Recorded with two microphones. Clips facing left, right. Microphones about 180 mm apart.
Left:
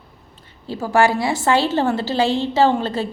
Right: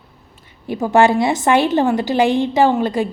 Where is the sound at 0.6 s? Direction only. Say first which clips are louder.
Right 3 dB; 20° right (ahead or behind).